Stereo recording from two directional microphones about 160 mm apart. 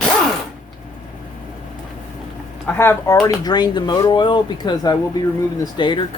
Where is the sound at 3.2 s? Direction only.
25° left (ahead or behind).